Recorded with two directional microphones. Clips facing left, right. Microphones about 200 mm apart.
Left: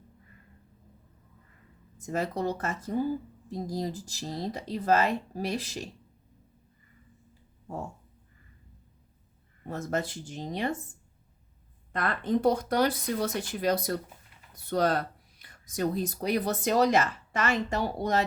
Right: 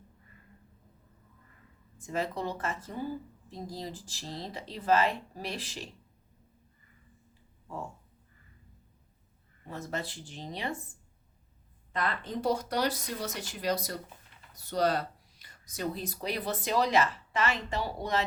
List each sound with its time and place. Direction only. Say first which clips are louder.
2.0 s a woman's voice: left 3 dB; 40° left (ahead or behind)
9.6 s speech: left 6 dB; 45° left (ahead or behind)
11.9 s speech: left 6 dB; 50° left (ahead or behind)